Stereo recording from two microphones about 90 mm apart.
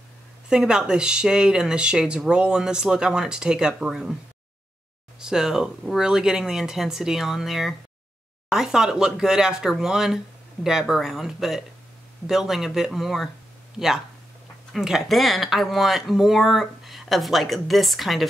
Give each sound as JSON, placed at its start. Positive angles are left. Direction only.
{"t": 0.5, "sound": "speech", "side_deg": -10}
{"t": 5.2, "sound": "speech", "side_deg": -5}